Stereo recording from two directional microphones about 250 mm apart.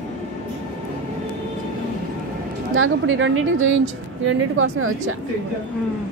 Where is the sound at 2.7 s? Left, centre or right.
Right.